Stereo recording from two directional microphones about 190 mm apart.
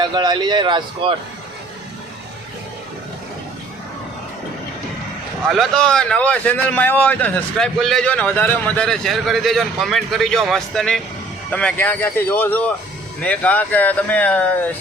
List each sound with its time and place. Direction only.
0.0 s speech: 20° right (ahead or behind)
5.5 s a man's voice: centre (ahead or behind)